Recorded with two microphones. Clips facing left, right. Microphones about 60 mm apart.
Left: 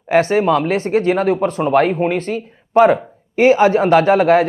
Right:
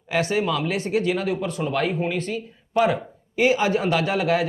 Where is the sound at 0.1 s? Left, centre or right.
Left.